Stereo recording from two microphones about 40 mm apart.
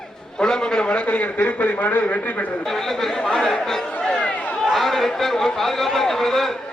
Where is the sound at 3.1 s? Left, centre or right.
Centre.